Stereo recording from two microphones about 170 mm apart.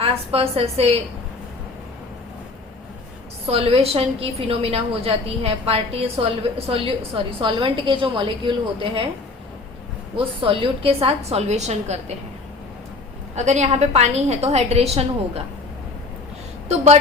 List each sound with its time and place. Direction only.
0.0 s a woman's voice: 35° right (ahead or behind)
3.5 s a woman's voice: 35° right (ahead or behind)
10.4 s a woman's voice: 30° right (ahead or behind)
13.3 s a woman's voice: 40° right (ahead or behind)
16.6 s a woman's voice: 40° right (ahead or behind)